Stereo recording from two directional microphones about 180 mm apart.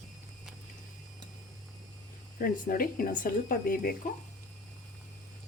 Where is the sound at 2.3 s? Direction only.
50° left (ahead or behind).